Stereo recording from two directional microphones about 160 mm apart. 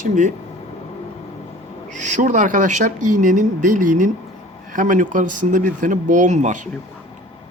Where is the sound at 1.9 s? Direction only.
50° right (ahead or behind).